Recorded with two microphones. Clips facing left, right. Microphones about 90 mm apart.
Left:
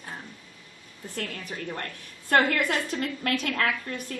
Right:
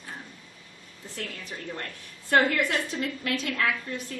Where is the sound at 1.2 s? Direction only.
50° left (ahead or behind).